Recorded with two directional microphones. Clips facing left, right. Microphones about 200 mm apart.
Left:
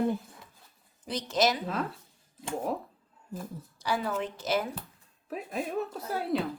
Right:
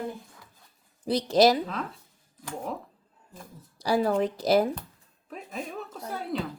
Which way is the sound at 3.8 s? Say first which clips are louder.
Right 7 dB; 35° right (ahead or behind).